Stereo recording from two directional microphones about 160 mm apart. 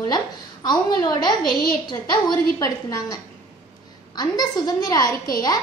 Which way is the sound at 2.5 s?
20° left (ahead or behind).